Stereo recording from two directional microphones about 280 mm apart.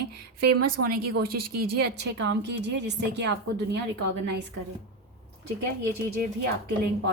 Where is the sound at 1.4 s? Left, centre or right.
Right.